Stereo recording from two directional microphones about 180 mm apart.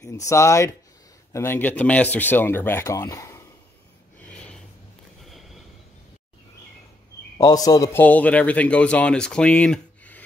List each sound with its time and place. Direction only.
0.0 s a man's voice: 15° left (ahead or behind)
4.2 s snort: 5° left (ahead or behind)
5.2 s a sound: centre (ahead or behind)
7.3 s a man's voice: 20° left (ahead or behind)